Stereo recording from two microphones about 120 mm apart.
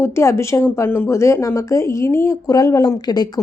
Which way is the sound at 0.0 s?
20° left (ahead or behind).